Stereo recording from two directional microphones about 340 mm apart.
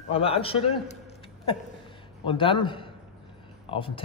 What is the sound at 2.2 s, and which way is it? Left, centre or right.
Speech, centre.